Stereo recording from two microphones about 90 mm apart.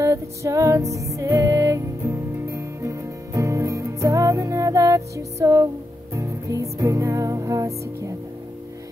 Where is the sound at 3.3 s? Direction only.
35° right (ahead or behind).